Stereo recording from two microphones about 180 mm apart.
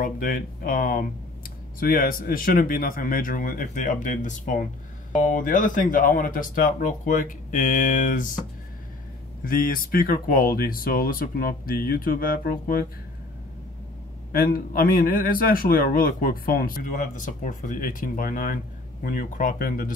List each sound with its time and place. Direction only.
0.0 s a man's voice: 50° left (ahead or behind)
9.4 s a man's voice: 50° left (ahead or behind)
14.3 s a man's voice: 55° left (ahead or behind)